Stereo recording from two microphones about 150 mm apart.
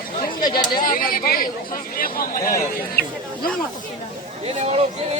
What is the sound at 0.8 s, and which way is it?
Speech, 65° left (ahead or behind).